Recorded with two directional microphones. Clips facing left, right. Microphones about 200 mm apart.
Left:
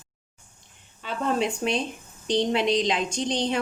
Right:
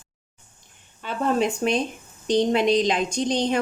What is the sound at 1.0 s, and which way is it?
A woman's voice, 45° right (ahead or behind).